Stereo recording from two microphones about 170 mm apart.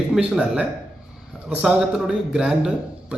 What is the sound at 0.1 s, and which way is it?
A man's voice, 5° right (ahead or behind).